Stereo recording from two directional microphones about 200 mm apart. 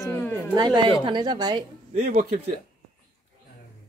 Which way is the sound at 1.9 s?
40° right (ahead or behind).